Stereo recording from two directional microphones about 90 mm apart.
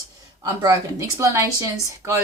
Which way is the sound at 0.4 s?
35° right (ahead or behind).